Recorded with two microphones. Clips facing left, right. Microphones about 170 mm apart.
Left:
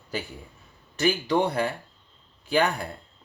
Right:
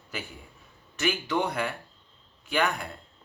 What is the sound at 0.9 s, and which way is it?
Speech, 35° left (ahead or behind).